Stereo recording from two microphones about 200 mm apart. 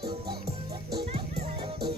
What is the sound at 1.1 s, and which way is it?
Music, 30° right (ahead or behind).